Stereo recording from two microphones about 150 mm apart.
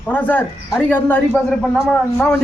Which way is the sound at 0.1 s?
10° left (ahead or behind).